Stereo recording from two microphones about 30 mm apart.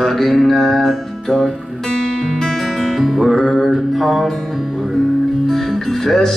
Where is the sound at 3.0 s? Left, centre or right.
Centre.